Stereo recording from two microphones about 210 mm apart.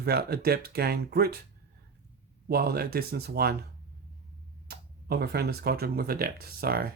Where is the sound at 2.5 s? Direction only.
50° right (ahead or behind).